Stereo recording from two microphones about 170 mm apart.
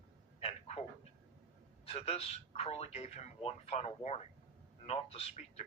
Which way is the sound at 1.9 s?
35° left (ahead or behind).